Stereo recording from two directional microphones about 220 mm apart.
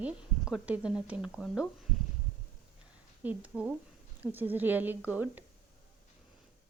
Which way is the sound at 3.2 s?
5° right (ahead or behind).